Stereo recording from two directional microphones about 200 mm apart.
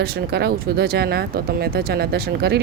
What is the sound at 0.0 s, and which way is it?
Speech, 55° right (ahead or behind).